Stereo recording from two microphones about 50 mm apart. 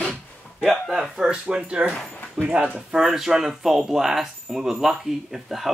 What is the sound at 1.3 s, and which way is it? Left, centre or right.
Speech, right.